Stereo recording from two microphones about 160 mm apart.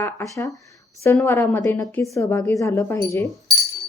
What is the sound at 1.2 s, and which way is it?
Speech, 15° left (ahead or behind).